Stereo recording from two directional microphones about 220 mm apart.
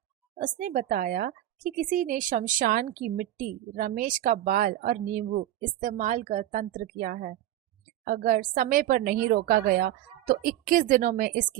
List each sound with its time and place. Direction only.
0.3 s a woman's voice: 35° right (ahead or behind)